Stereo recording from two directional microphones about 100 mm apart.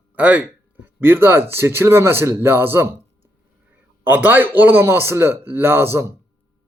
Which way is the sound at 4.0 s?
20° right (ahead or behind).